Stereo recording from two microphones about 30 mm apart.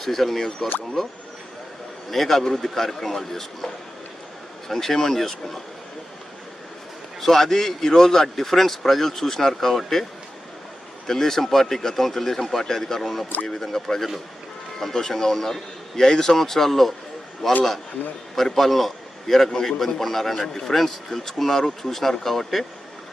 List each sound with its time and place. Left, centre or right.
0.0 s a man's voice: centre
4.7 s a man's voice: centre
7.2 s a man's voice: centre
13.0 s a man's voice: centre